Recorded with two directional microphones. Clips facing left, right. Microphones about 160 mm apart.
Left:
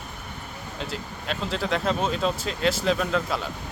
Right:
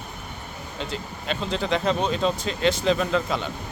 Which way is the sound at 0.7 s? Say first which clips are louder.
Right 2 dB; centre (ahead or behind).